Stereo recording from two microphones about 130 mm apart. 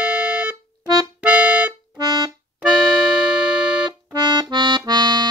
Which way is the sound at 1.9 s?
30° right (ahead or behind).